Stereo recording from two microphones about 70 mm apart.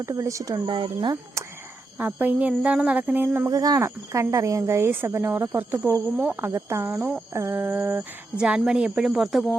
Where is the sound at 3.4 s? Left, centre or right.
Right.